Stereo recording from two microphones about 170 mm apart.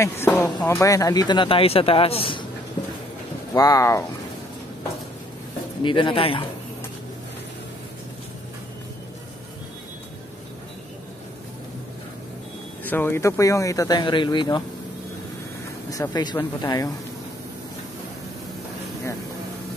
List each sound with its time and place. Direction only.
0.0 s speech: 15° left (ahead or behind); by 2.4 s 35° left (ahead or behind)
3.5 s speech: 20° left (ahead or behind)
5.8 s speech: 30° left (ahead or behind)
12.8 s speech: 10° left (ahead or behind); by 14.6 s 25° left (ahead or behind)
15.9 s speech: 20° left (ahead or behind)